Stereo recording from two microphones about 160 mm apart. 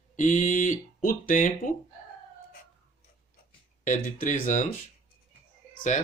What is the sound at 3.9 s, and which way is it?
Speech, 55° left (ahead or behind).